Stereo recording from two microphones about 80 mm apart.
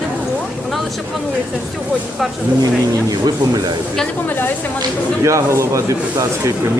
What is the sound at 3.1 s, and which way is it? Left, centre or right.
Speech, right.